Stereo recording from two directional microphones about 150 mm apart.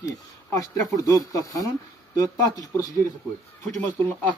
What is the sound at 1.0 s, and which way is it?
Speech, 25° left (ahead or behind).